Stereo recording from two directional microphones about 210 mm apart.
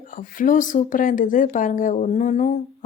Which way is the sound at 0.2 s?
40° left (ahead or behind).